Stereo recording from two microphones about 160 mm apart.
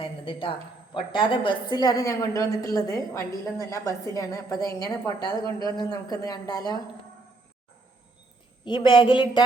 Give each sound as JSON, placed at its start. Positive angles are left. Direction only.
{"t": 0.0, "sound": "a sound", "side_deg": 30}
{"t": 0.9, "sound": "a woman's voice", "side_deg": 30}
{"t": 8.6, "sound": "a woman's voice", "side_deg": 30}